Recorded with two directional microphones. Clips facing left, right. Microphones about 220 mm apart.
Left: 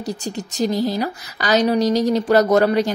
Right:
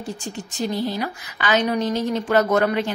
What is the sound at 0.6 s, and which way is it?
A woman's voice, 40° left (ahead or behind).